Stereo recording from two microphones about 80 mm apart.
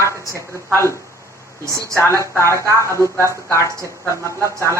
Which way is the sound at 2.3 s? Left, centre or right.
Left.